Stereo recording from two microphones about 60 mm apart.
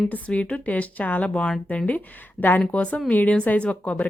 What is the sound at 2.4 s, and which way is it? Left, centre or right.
Speech, left.